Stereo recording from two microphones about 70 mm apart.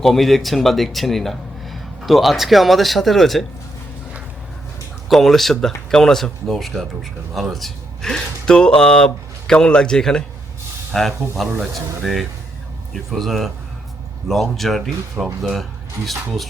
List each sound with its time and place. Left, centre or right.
0.0 s speech: centre
5.0 s speech: centre